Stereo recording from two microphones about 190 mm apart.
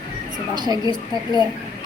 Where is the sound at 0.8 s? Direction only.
25° left (ahead or behind).